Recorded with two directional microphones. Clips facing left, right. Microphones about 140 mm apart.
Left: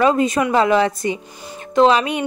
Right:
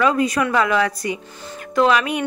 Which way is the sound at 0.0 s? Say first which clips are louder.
Left 2 dB; 25° left (ahead or behind).